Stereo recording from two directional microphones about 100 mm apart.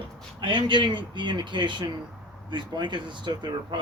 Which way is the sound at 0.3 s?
50° right (ahead or behind).